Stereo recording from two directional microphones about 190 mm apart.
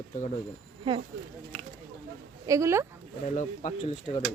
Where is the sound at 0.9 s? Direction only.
25° right (ahead or behind).